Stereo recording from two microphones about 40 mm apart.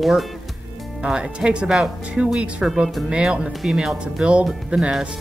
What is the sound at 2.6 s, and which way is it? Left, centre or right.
Speech, centre.